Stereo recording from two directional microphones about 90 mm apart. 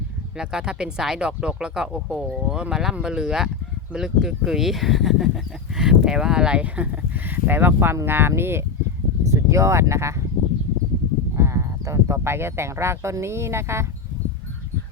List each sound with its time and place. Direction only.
0.3 s speech: 10° right (ahead or behind); by 10.2 s 30° right (ahead or behind)
11.3 s speech: 35° right (ahead or behind)